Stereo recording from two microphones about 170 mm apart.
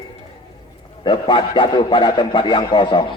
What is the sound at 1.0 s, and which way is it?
Speech, 25° left (ahead or behind).